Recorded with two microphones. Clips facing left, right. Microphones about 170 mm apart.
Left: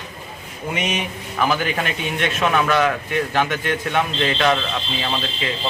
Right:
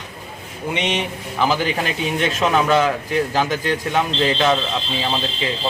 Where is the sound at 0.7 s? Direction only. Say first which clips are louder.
Right 2 dB; 30° right (ahead or behind).